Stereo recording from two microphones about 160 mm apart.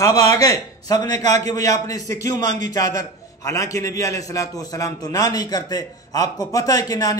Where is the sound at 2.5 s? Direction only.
50° right (ahead or behind).